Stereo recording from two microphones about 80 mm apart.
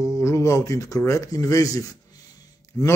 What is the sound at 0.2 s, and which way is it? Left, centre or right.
Speech, left.